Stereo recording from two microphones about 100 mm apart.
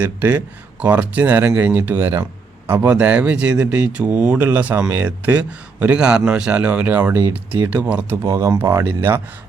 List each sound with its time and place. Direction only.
0.0 s a man's voice: 20° right (ahead or behind)
8.2 s speech: 35° right (ahead or behind)